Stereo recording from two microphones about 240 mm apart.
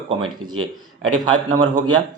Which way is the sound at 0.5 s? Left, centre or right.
Right.